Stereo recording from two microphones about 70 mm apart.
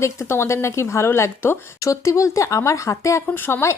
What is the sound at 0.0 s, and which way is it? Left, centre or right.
Speech, left.